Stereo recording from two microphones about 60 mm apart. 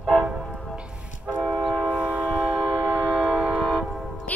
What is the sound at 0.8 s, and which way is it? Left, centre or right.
Train, centre.